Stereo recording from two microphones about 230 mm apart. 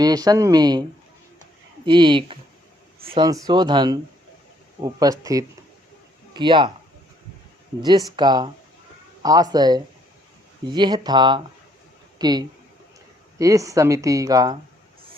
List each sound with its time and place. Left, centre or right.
0.0 s speech: centre
7.8 s speech: centre